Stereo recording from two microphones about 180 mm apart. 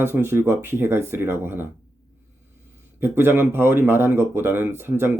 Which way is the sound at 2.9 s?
10° right (ahead or behind).